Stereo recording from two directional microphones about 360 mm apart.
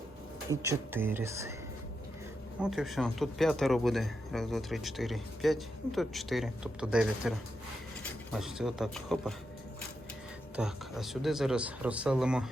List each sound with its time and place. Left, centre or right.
0.5 s speech: centre
2.6 s speech: centre
10.5 s speech: centre